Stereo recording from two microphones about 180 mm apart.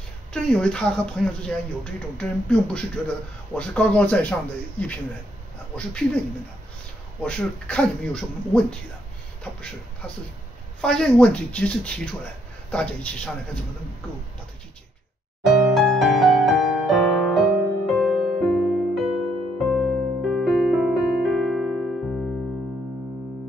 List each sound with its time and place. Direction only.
0.3 s speech: 5° left (ahead or behind)
7.2 s speech: 5° left (ahead or behind)
10.0 s speech: 10° left (ahead or behind)
15.4 s music: centre (ahead or behind)